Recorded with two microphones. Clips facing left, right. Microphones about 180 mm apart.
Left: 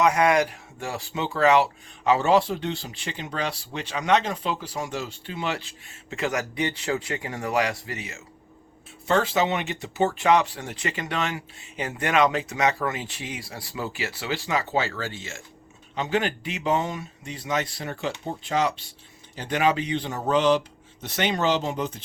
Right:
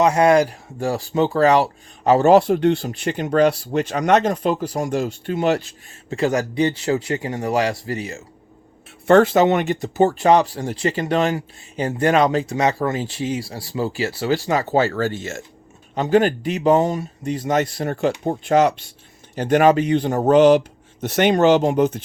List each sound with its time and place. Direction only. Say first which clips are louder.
0.0 s speech: right 6 dB; 30° right (ahead or behind)
9.0 s speech: right 9 dB; 55° right (ahead or behind)